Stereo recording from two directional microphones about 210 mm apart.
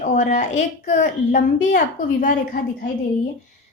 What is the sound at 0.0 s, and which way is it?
A woman's voice, 40° left (ahead or behind).